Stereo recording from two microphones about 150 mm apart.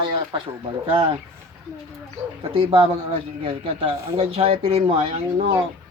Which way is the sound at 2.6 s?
40° right (ahead or behind).